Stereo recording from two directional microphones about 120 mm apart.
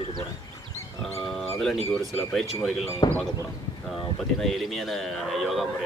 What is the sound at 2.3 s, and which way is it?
Speech, centre (ahead or behind).